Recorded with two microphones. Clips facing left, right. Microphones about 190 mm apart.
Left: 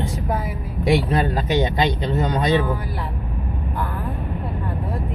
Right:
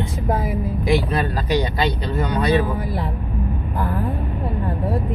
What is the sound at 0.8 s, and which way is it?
Speech, 25° left (ahead or behind).